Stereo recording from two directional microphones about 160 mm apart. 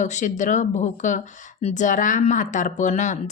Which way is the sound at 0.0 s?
50° left (ahead or behind).